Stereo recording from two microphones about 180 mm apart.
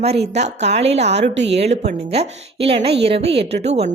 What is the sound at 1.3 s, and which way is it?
Speech, 75° right (ahead or behind).